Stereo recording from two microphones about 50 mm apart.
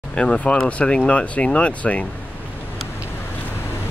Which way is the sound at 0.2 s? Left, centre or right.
Centre.